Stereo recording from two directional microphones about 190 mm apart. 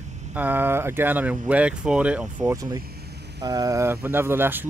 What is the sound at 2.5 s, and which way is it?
Speech, 20° right (ahead or behind).